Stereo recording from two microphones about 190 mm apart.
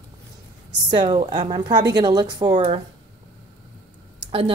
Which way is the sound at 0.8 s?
25° right (ahead or behind).